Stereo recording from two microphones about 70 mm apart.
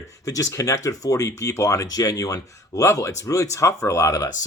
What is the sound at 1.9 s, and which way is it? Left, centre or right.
Speech, left.